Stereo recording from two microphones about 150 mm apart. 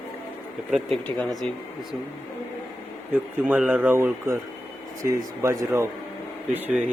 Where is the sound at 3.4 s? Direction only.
5° right (ahead or behind).